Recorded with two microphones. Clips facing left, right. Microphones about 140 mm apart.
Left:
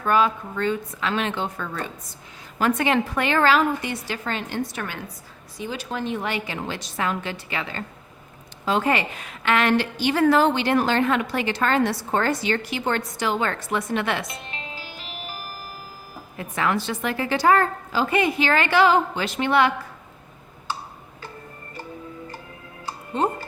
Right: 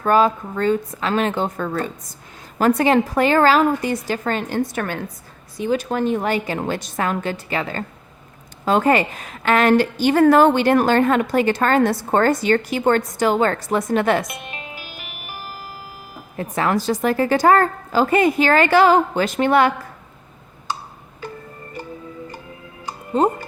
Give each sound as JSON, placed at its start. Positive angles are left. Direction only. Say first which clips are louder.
{"t": 0.0, "sound": "a woman's voice", "louder": "right 4 dB", "side_deg": -40}
{"t": 14.3, "sound": "music", "louder": "right 3 dB", "side_deg": -15}
{"t": 16.4, "sound": "a woman's voice", "louder": "right 4 dB", "side_deg": -40}
{"t": 23.2, "sound": "a woman's voice", "louder": "right 6 dB", "side_deg": -40}